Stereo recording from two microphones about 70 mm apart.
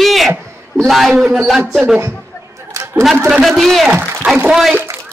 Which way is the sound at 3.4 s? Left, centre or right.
Centre.